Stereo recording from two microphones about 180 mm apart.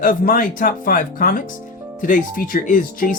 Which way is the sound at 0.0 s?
50° left (ahead or behind).